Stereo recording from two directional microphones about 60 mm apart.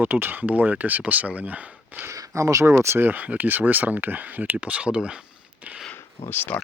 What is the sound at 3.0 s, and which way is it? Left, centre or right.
Speech, right.